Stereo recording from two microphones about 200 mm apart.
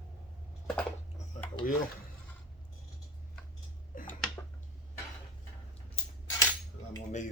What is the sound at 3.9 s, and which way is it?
Tick-tock, 45° left (ahead or behind).